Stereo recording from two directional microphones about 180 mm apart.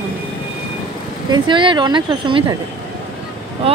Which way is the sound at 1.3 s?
25° right (ahead or behind).